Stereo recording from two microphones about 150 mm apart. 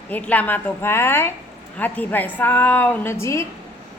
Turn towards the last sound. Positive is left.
turn(degrees=20)  # may be behind; listen again after turning